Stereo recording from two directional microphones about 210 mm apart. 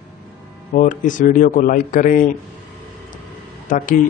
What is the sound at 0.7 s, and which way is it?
A man's voice, 40° left (ahead or behind).